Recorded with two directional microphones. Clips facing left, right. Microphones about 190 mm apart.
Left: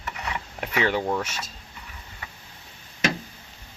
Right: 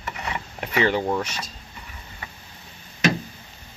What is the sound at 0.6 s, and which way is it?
Speech, 5° left (ahead or behind).